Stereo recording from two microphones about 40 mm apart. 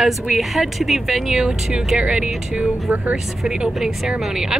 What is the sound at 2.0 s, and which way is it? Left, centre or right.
Speech, right.